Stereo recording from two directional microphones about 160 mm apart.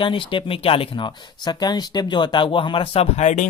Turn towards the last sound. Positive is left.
turn(degrees=45)  # may be behind; listen again after turning